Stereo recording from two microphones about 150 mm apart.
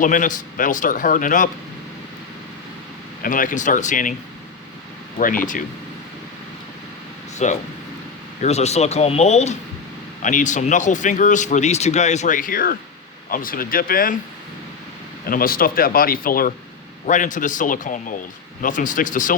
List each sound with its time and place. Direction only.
0.0 s speech: 65° left (ahead or behind)
3.2 s speech: 65° left (ahead or behind)
5.1 s speech: 65° left (ahead or behind)
7.3 s a man's voice: 50° left (ahead or behind); by 14.2 s 70° left (ahead or behind)
15.3 s speech: 75° left (ahead or behind)
17.1 s speech: 60° left (ahead or behind)